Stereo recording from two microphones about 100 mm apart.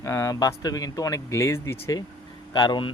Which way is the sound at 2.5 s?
50° left (ahead or behind).